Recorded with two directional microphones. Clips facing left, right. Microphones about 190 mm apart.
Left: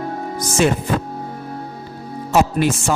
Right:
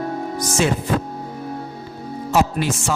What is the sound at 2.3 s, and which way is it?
Speech, 55° left (ahead or behind).